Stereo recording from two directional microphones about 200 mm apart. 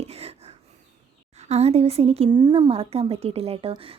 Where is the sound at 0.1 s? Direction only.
30° right (ahead or behind).